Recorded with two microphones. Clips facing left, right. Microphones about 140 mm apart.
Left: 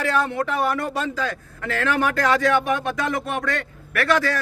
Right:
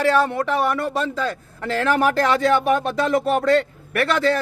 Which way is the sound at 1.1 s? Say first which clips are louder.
Right 2 dB; 30° right (ahead or behind).